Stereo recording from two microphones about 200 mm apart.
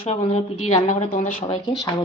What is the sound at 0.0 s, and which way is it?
Speech, 30° left (ahead or behind).